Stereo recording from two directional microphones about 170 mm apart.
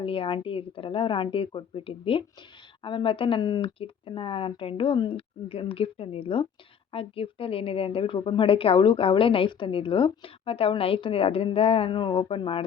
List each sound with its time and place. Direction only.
0.0 s a woman's voice: 30° left (ahead or behind)